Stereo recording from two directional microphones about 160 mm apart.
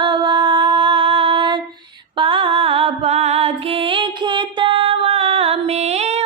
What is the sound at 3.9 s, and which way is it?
Music, 30° right (ahead or behind).